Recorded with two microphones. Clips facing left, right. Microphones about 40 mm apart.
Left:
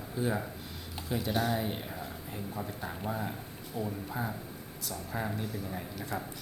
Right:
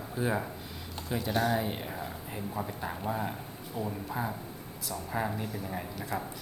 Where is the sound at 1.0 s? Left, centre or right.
Centre.